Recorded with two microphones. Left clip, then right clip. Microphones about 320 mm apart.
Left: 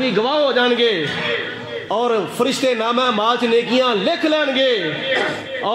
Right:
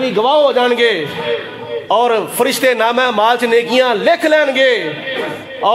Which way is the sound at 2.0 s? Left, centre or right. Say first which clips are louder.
Right 5 dB; right.